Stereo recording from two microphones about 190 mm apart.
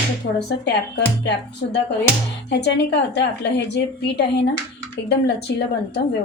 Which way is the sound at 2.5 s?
65° left (ahead or behind).